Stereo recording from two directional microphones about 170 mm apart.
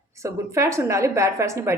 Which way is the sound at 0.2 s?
20° right (ahead or behind).